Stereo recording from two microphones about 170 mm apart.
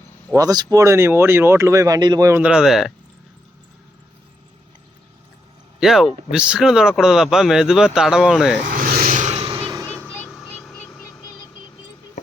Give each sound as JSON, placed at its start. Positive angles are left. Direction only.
{"t": 0.3, "sound": "speech", "side_deg": -25}
{"t": 2.4, "sound": "speech", "side_deg": -5}
{"t": 5.8, "sound": "speech", "side_deg": 0}
{"t": 8.6, "sound": "vehicle", "side_deg": -60}
{"t": 10.2, "sound": "vehicle", "side_deg": 5}